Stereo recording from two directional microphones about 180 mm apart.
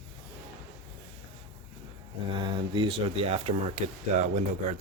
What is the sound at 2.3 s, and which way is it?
Speech, 25° right (ahead or behind).